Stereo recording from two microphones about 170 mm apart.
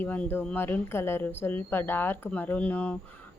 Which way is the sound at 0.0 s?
10° left (ahead or behind).